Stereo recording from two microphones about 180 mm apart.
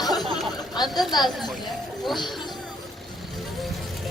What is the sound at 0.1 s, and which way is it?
Chatter, centre (ahead or behind).